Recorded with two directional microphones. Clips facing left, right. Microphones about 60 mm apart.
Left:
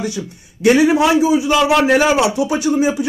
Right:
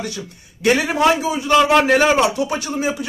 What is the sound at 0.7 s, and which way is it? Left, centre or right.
Speech, centre.